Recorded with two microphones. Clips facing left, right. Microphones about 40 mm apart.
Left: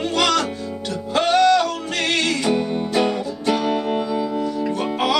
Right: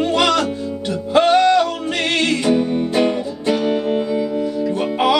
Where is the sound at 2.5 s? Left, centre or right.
Centre.